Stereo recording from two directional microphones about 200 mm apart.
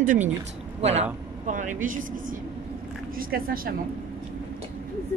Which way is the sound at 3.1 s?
45° right (ahead or behind).